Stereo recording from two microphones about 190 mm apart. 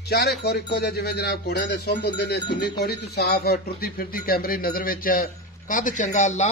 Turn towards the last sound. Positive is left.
turn(degrees=40)  # may be behind; listen again after turning